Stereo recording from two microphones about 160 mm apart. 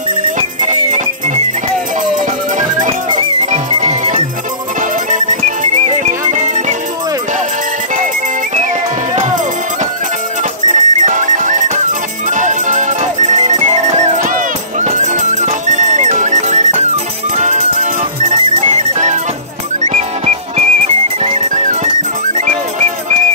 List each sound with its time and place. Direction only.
0.4 s music: 45° right (ahead or behind)
3.1 s music: 30° right (ahead or behind)
3.8 s music: 50° right (ahead or behind)
10.7 s music: 50° right (ahead or behind)